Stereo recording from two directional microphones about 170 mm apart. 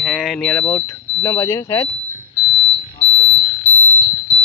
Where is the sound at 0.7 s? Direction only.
15° left (ahead or behind).